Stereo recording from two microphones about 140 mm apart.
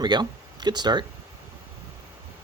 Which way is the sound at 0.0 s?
30° right (ahead or behind).